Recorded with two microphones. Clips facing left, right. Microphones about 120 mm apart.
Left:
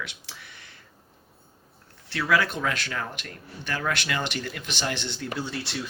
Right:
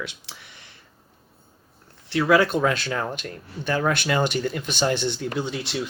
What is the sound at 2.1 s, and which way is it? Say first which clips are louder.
Speech: right 6 dB; 25° right (ahead or behind).